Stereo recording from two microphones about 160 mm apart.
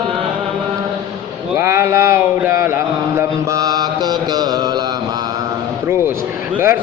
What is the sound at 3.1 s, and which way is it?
Mantra, 25° right (ahead or behind).